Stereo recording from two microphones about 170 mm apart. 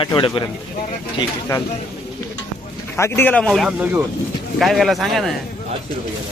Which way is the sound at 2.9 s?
10° left (ahead or behind).